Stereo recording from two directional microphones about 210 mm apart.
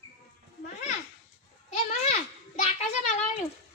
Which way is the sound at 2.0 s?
35° left (ahead or behind).